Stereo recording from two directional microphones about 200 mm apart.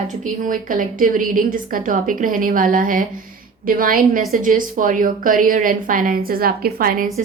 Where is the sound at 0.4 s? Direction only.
40° right (ahead or behind).